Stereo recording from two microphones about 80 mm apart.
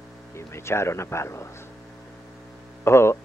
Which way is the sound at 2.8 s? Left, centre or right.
Left.